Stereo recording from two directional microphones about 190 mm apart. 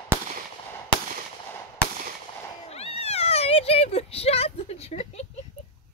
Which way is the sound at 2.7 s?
30° left (ahead or behind).